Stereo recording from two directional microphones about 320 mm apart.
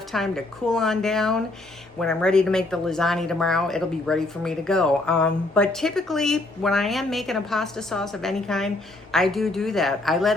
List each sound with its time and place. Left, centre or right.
0.1 s speech: centre